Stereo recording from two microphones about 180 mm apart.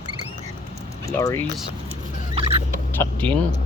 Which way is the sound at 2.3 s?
35° right (ahead or behind).